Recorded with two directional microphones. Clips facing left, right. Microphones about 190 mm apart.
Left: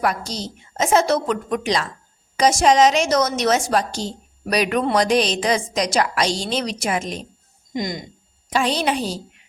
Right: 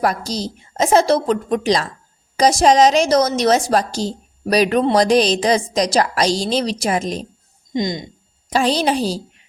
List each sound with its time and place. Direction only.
0.0 s a woman's voice: 35° right (ahead or behind)
7.7 s speech: 25° right (ahead or behind)
8.4 s a woman's voice: 35° right (ahead or behind)